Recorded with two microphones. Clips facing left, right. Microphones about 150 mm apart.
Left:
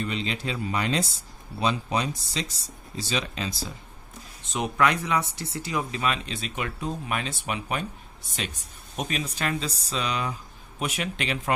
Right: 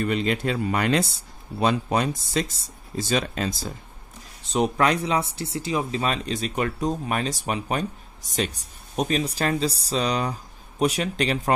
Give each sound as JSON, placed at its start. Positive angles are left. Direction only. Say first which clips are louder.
{"t": 0.0, "sound": "speech", "louder": "right 6 dB", "side_deg": -50}
{"t": 4.5, "sound": "speech", "louder": "right 3 dB", "side_deg": -35}